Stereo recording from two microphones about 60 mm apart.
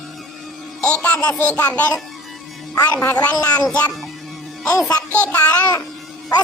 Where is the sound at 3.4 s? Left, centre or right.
Left.